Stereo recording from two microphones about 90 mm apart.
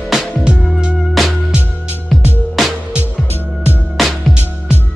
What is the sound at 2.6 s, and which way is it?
Music, centre (ahead or behind).